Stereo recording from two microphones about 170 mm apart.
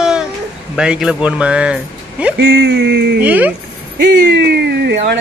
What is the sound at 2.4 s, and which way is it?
Speech, 85° right.